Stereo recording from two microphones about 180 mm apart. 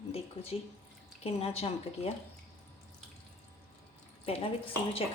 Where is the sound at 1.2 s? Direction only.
35° left (ahead or behind).